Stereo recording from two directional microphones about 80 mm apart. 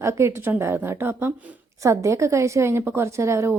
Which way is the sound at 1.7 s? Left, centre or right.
Right.